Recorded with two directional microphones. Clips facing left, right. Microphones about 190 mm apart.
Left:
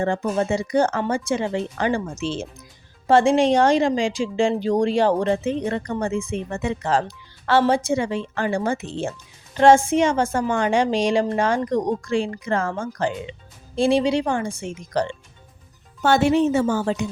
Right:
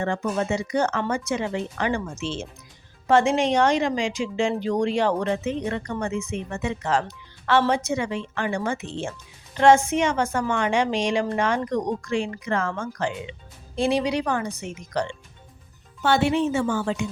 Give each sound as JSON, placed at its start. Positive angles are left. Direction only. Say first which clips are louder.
{"t": 0.0, "sound": "speech", "louder": "left 3 dB", "side_deg": 35}
{"t": 16.0, "sound": "speech", "louder": "left 4 dB", "side_deg": 45}